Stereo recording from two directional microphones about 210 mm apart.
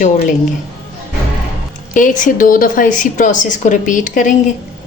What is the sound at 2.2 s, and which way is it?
A woman's voice, 40° left (ahead or behind).